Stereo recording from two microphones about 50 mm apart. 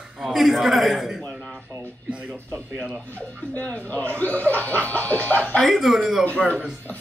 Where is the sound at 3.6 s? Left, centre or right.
Left.